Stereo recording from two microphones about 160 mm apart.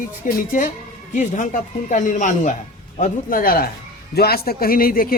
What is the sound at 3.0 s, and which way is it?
Speech, 60° left (ahead or behind).